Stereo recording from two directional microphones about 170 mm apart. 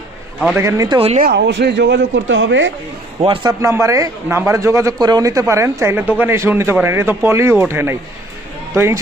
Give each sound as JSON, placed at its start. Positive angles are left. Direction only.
{"t": 0.5, "sound": "a man's voice", "side_deg": -20}
{"t": 0.9, "sound": "speech", "side_deg": -35}
{"t": 1.2, "sound": "speech", "side_deg": -85}
{"t": 3.2, "sound": "speech", "side_deg": -30}
{"t": 3.6, "sound": "speech", "side_deg": -15}